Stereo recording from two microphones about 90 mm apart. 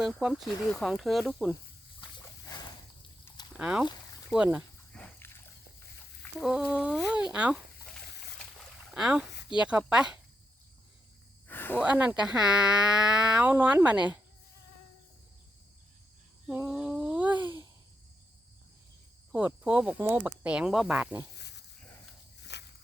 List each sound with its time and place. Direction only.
0.0 s speech: 5° right (ahead or behind)
2.0 s a sound: 55° left (ahead or behind)
3.6 s speech: 10° right (ahead or behind)
4.9 s dog: 10° left (ahead or behind)
6.4 s speech: 10° right (ahead or behind)
8.5 s boat: 5° right (ahead or behind)
9.6 s speech: 10° right (ahead or behind)
11.4 s snake: 20° left (ahead or behind)
11.8 s speech: 15° right (ahead or behind)
16.5 s a sound: 15° right (ahead or behind)
19.6 s speech: 15° right (ahead or behind)